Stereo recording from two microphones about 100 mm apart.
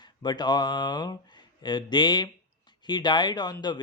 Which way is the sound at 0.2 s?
45° left (ahead or behind).